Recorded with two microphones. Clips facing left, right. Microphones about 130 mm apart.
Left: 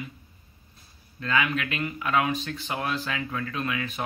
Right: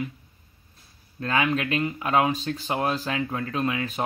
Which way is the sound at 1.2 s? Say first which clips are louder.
Right 2 dB; 35° right (ahead or behind).